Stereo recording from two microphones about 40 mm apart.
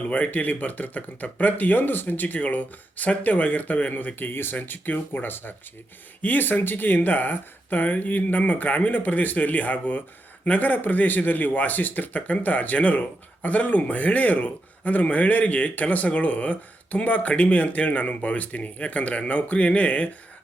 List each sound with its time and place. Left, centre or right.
0.0 s speech: left
0.3 s speech: left
4.1 s speech: left
4.5 s speech: left